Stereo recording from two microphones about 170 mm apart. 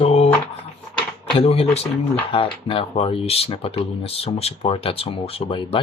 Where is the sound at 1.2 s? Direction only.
35° left (ahead or behind).